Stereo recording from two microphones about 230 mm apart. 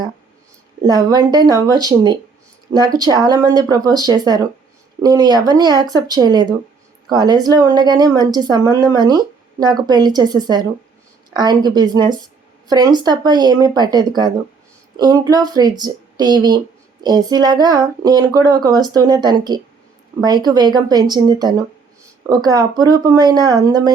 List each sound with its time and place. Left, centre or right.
0.9 s a woman's voice: centre